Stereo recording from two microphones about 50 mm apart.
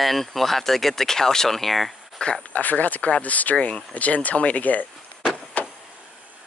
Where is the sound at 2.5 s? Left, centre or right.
Left.